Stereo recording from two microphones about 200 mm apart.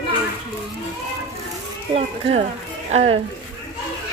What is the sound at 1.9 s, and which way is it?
Speech, 30° right (ahead or behind).